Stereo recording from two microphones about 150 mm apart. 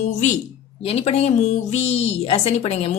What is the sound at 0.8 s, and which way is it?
Speech, 40° left (ahead or behind).